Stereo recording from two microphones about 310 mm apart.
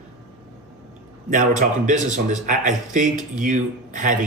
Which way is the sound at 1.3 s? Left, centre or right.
Right.